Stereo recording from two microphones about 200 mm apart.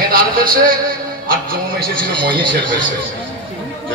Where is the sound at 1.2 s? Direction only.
45° right (ahead or behind).